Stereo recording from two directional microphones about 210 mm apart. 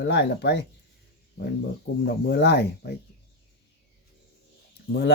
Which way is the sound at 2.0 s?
50° left (ahead or behind).